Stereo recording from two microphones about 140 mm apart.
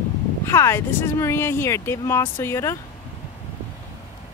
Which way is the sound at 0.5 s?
20° left (ahead or behind).